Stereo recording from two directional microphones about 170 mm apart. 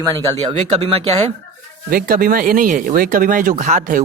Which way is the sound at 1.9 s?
60° right (ahead or behind).